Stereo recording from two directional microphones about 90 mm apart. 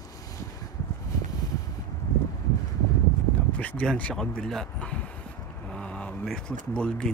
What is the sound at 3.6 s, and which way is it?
Speech, 10° left (ahead or behind).